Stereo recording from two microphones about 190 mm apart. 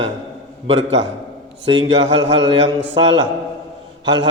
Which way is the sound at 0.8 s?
75° right (ahead or behind).